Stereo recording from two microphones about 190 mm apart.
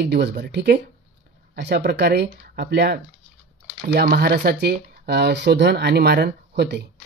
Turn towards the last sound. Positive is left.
turn(degrees=-60)  # may be behind; listen again after turning